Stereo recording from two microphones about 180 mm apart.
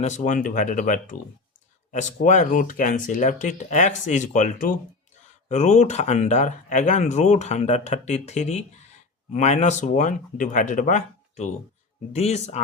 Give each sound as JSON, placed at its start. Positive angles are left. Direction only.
{"t": 0.0, "sound": "speech", "side_deg": 40}